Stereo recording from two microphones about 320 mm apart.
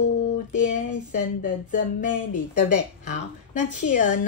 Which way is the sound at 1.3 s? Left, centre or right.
Left.